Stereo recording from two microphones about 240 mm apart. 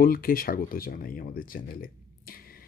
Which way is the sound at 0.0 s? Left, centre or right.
Left.